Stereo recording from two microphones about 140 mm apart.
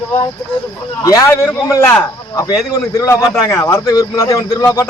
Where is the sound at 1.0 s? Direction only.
25° left (ahead or behind).